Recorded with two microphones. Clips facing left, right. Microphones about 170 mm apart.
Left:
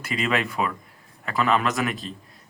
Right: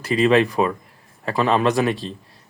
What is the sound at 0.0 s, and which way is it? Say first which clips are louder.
A man's voice: right 9 dB; 35° right (ahead or behind).